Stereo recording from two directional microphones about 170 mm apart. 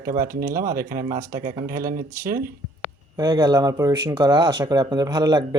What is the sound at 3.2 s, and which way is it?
Speech, 25° right (ahead or behind).